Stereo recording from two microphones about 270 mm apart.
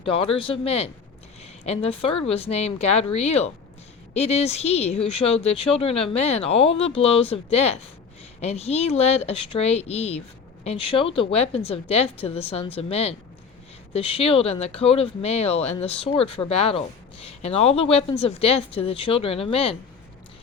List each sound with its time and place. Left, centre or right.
0.0 s speech: centre